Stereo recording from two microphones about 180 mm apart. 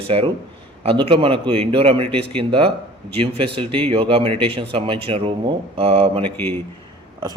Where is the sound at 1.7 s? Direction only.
30° right (ahead or behind).